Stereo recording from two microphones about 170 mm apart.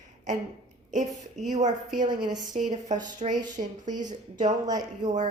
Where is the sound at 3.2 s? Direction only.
35° right (ahead or behind).